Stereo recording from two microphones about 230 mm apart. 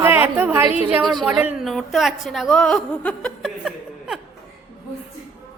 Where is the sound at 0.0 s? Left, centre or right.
Centre.